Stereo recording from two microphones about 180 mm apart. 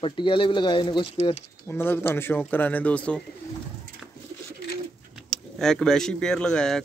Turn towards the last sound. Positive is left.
turn(degrees=5)  # may be behind; listen again after turning